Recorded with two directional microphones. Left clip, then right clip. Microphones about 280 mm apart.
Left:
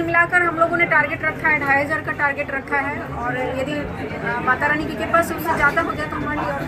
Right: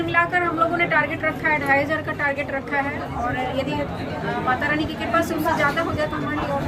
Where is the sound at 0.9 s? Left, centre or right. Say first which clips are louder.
Left 2 dB; centre.